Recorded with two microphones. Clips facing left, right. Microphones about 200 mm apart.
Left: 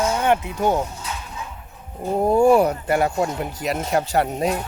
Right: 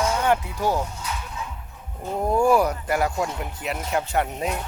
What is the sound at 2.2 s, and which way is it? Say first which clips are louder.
Speech: left 4 dB; 30° left (ahead or behind).